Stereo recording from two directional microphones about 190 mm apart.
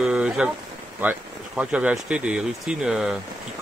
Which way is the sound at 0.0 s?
5° right (ahead or behind).